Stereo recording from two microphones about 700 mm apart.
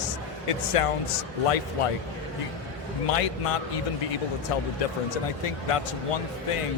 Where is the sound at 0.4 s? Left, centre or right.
Left.